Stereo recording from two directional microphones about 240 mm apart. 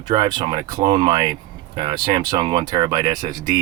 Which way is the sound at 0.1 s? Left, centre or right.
Centre.